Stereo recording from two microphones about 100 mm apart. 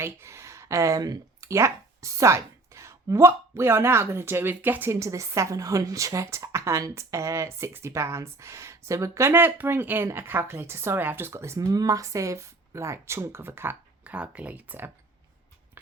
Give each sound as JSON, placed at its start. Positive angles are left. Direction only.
{"t": 0.0, "sound": "a woman's voice", "side_deg": -25}